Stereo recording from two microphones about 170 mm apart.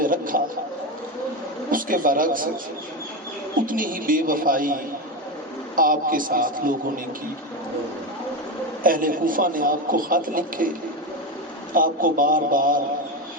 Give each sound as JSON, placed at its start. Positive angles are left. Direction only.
{"t": 0.0, "sound": "a sound", "side_deg": -55}
{"t": 1.7, "sound": "a man's voice", "side_deg": -55}
{"t": 3.7, "sound": "a man's voice", "side_deg": -55}
{"t": 8.8, "sound": "a man's voice", "side_deg": -55}
{"t": 11.7, "sound": "a man's voice", "side_deg": -55}